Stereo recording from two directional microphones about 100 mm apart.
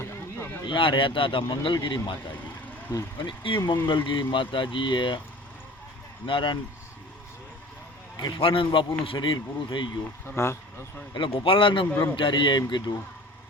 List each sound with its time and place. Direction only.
0.0 s a sound: 25° left (ahead or behind)
0.6 s a man's voice: 55° left (ahead or behind)
3.2 s a man's voice: 55° left (ahead or behind)
6.2 s a man's voice: 55° left (ahead or behind)
8.4 s a man's voice: 60° left (ahead or behind)
10.2 s speech: 25° left (ahead or behind)
11.1 s a man's voice: 55° left (ahead or behind)